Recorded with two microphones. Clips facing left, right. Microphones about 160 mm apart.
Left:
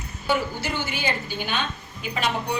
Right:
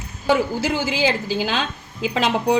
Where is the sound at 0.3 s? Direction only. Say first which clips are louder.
Right 6 dB; 90° right.